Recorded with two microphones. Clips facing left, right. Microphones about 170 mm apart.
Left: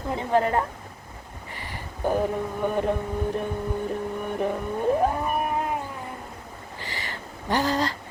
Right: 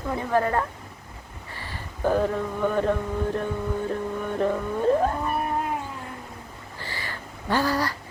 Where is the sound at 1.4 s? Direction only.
15° left (ahead or behind).